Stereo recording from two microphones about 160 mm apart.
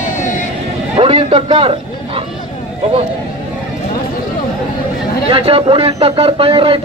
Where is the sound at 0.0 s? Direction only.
50° left (ahead or behind).